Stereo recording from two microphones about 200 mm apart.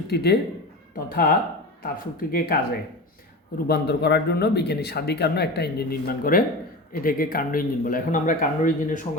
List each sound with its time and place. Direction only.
0.1 s speech: 55° left (ahead or behind)
3.7 s speech: 55° left (ahead or behind)